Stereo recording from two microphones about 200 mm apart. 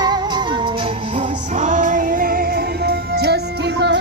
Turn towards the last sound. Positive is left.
turn(degrees=-60)  # may be behind; listen again after turning